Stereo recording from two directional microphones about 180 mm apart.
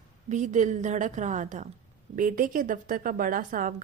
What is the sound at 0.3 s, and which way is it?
A woman's voice, 45° right (ahead or behind).